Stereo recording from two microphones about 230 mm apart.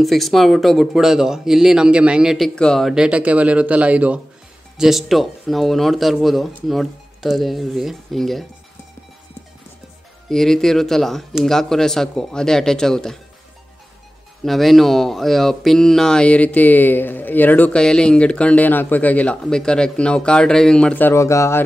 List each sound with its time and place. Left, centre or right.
0.0 s speech: centre
10.3 s speech: centre
14.4 s speech: centre